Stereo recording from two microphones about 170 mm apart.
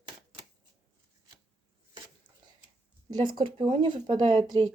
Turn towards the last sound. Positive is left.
turn(degrees=-25)  # may be behind; listen again after turning